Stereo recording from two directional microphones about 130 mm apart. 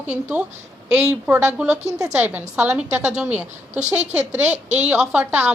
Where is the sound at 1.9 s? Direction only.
25° right (ahead or behind).